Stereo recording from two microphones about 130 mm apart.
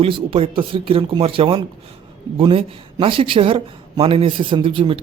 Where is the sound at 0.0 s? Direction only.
45° right (ahead or behind).